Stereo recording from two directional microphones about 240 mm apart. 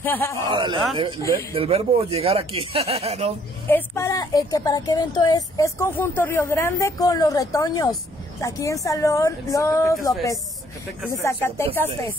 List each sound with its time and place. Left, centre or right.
0.0 s speech: centre
0.5 s speech: centre
3.6 s speech: centre
11.2 s speech: centre